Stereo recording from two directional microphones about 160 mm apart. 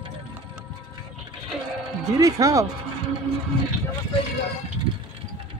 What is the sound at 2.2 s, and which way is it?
Speech, 20° right (ahead or behind).